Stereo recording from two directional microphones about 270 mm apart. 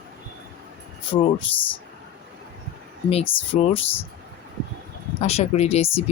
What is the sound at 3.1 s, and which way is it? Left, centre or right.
Speech, left.